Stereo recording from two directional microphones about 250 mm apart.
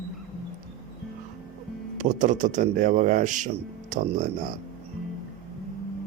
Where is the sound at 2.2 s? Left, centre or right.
Right.